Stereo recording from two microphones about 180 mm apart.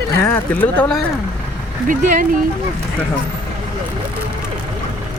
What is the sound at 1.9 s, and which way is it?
Speech, 45° right (ahead or behind).